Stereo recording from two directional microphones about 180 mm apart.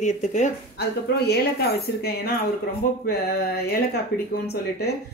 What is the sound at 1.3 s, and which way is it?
Speech, 60° left (ahead or behind).